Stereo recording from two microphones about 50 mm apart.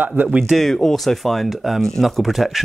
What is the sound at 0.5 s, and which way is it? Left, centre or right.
Speech, centre.